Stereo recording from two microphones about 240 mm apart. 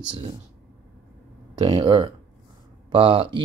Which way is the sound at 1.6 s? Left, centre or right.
Right.